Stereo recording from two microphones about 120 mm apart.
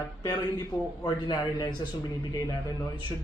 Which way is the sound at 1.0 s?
35° left (ahead or behind).